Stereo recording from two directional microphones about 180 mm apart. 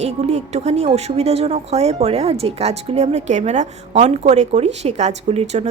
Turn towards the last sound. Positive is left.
turn(degrees=-35)  # may be behind; listen again after turning